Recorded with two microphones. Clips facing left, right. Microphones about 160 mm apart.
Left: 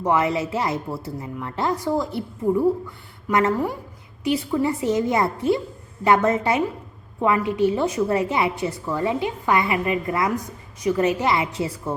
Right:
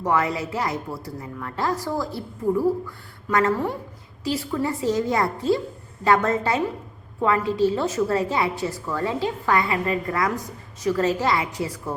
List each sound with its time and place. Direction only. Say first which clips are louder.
0.0 s a woman's voice: left 2 dB; 20° left (ahead or behind)